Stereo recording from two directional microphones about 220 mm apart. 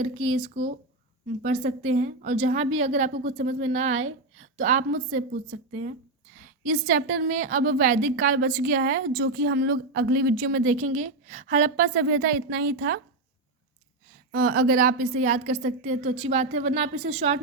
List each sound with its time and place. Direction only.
0.0 s a woman's voice: 25° right (ahead or behind); by 13.0 s 45° right (ahead or behind)
14.3 s a woman's voice: 45° right (ahead or behind)